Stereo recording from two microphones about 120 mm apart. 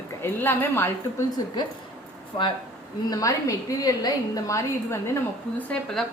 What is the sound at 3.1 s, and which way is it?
A woman's voice, 30° left (ahead or behind).